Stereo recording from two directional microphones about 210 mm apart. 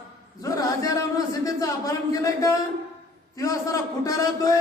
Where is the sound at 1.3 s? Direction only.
15° left (ahead or behind).